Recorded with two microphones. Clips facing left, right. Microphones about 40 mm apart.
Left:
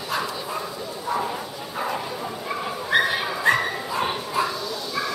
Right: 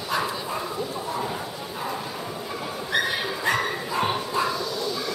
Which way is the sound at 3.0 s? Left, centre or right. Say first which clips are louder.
Left 4 dB; centre.